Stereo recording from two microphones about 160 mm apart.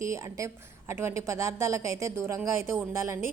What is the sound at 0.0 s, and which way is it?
A woman's voice, 20° right (ahead or behind).